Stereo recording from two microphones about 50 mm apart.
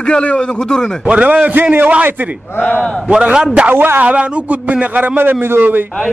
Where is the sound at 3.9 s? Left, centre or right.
Right.